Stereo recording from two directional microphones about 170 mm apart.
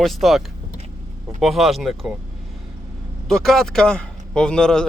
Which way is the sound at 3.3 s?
Centre (ahead or behind).